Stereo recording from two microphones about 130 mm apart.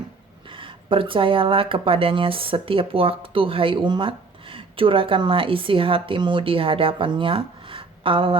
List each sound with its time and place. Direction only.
0.5 s speech: 40° right (ahead or behind)